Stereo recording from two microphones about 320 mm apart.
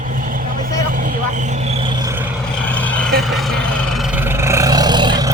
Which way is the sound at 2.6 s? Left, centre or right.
Centre.